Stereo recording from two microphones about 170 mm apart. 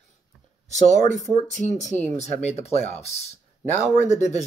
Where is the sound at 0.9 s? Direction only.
45° left (ahead or behind).